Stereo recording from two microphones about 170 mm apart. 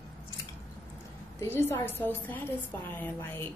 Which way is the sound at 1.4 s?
15° left (ahead or behind).